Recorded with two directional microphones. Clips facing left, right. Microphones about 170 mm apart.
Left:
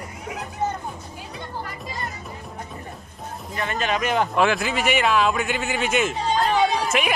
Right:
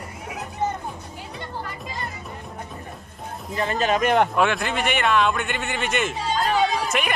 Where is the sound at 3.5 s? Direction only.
35° right (ahead or behind).